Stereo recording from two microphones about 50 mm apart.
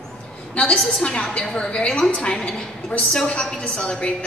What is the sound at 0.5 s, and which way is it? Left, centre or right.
A woman's voice, centre.